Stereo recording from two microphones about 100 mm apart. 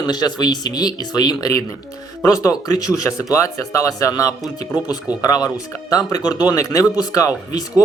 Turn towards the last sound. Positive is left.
turn(degrees=35)  # may be behind; listen again after turning